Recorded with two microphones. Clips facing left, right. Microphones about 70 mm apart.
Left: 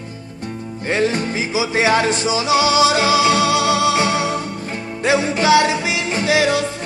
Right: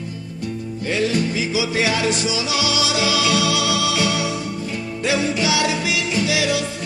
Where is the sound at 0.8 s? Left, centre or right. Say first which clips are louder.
Left 2 dB; left.